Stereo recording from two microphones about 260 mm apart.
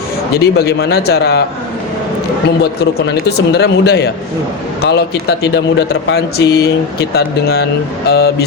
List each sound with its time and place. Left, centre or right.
0.3 s a man's voice: left
3.2 s a man's voice: left